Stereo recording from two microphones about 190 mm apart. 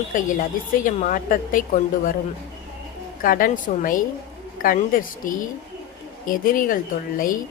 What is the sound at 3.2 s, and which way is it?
A woman's voice, 45° left (ahead or behind).